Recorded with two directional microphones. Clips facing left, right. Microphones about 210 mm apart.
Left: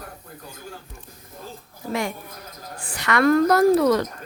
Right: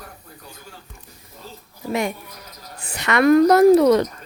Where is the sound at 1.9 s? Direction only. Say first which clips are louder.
Right 3 dB; 20° right (ahead or behind).